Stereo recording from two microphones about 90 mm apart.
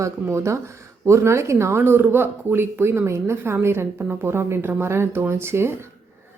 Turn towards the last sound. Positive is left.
turn(degrees=-30)  # may be behind; listen again after turning